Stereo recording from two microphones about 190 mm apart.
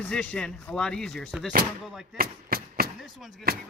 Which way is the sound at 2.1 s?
50° right (ahead or behind).